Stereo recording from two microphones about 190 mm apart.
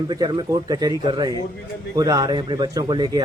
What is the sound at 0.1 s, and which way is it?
Speech, 25° right (ahead or behind).